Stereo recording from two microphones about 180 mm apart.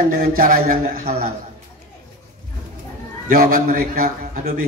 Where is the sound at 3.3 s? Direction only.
50° right (ahead or behind).